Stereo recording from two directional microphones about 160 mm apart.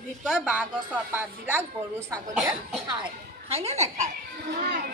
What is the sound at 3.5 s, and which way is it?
Speech, 40° right (ahead or behind).